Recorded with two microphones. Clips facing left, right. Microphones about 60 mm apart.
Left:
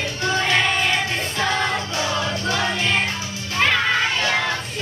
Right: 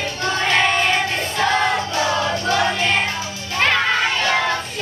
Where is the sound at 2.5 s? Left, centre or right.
Centre.